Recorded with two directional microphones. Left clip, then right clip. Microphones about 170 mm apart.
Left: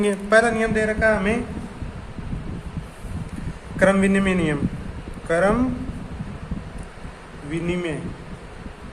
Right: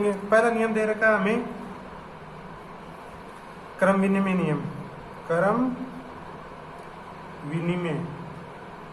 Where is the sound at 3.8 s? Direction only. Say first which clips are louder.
Left 4 dB; 35° left (ahead or behind).